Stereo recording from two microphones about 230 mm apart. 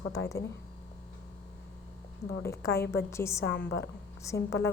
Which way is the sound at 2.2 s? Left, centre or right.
Left.